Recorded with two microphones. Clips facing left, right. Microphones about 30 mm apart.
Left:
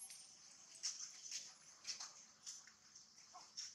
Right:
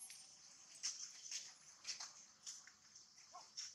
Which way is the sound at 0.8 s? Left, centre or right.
Centre.